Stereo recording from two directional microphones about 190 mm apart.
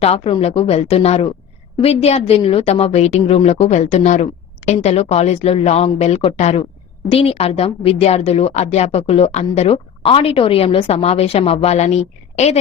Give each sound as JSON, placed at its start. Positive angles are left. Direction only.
{"t": 0.0, "sound": "a woman's voice", "side_deg": 30}